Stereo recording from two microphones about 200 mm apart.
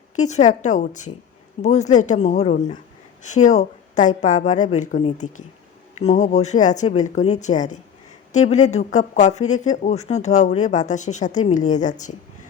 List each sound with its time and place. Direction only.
0.2 s speech: 35° left (ahead or behind)